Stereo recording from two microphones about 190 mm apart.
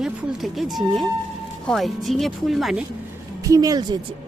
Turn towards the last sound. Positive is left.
turn(degrees=-20)  # may be behind; listen again after turning